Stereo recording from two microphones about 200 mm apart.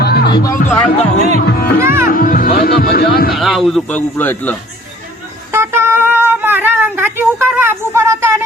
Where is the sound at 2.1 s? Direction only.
45° left (ahead or behind).